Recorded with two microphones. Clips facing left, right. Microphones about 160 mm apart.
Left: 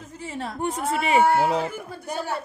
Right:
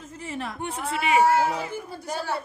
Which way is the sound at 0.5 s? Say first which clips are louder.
Left 8 dB; 40° left (ahead or behind).